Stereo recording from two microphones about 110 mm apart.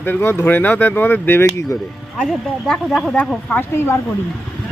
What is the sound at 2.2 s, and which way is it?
Speech, 5° left (ahead or behind).